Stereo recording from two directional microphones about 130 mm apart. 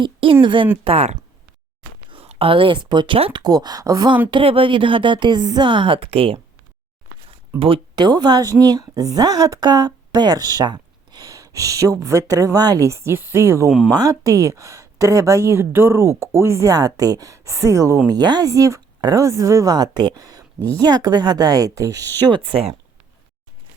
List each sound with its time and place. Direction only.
0.0 s speech: 40° right (ahead or behind)
0.9 s speech: 55° right (ahead or behind)
3.4 s speech: 30° right (ahead or behind)
4.3 s speech: 40° right (ahead or behind)
7.6 s speech: 40° right (ahead or behind); by 13.7 s 20° right (ahead or behind)
13.7 s speech: 5° right (ahead or behind)
13.9 s speech: 25° right (ahead or behind)
20.6 s speech: 15° left (ahead or behind)
20.8 s speech: 30° right (ahead or behind)
22.3 s speech: 45° right (ahead or behind)